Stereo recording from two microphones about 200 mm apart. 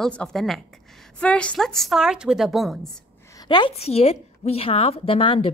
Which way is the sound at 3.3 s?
20° left (ahead or behind).